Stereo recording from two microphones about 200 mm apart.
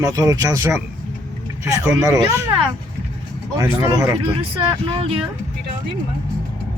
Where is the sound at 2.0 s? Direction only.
15° right (ahead or behind).